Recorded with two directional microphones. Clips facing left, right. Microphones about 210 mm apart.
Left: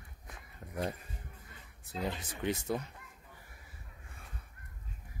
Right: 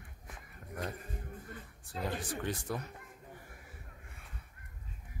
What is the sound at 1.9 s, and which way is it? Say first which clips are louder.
Speech: even; 20° left (ahead or behind).